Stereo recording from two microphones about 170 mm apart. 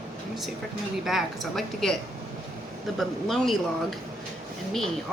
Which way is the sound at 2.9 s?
Centre (ahead or behind).